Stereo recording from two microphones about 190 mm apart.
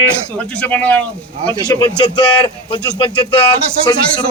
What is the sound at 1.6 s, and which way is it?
Speech, 20° left (ahead or behind).